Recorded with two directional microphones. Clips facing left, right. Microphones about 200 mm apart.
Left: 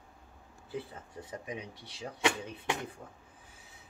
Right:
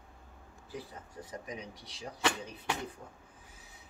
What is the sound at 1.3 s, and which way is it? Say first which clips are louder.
Speech: left 2 dB; 25° left (ahead or behind).